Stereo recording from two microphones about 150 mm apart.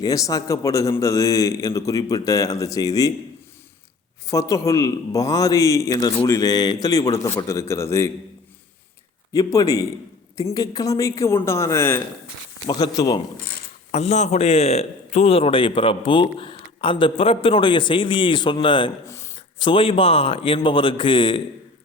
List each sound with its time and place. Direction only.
0.0 s a man's voice: 20° left (ahead or behind)
4.3 s a man's voice: 20° left (ahead or behind)
9.3 s a man's voice: 25° left (ahead or behind)
13.9 s a man's voice: 45° left (ahead or behind)
19.0 s a sound: 20° left (ahead or behind)
19.5 s a man's voice: 35° left (ahead or behind)